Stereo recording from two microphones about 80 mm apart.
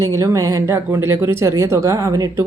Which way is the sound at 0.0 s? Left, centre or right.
Right.